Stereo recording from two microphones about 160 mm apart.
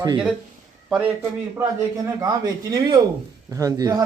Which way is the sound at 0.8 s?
5° right (ahead or behind).